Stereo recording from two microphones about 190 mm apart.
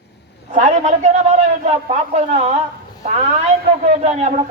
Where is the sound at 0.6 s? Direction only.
35° right (ahead or behind).